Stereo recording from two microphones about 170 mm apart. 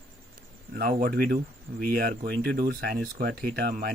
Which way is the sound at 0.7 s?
60° right (ahead or behind).